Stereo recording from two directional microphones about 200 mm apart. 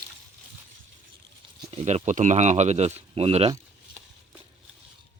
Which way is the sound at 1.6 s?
35° right (ahead or behind).